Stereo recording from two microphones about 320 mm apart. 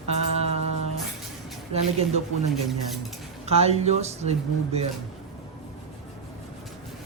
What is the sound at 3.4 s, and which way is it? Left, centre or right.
Speech, centre.